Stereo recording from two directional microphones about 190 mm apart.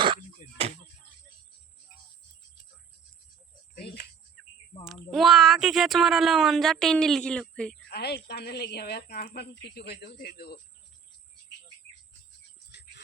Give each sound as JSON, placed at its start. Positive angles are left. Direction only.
{"t": 3.8, "sound": "cricket", "side_deg": 55}
{"t": 4.9, "sound": "a woman's voice", "side_deg": 0}
{"t": 7.9, "sound": "a woman's voice", "side_deg": 60}